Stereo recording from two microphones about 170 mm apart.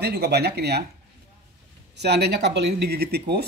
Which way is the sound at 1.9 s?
75° right (ahead or behind).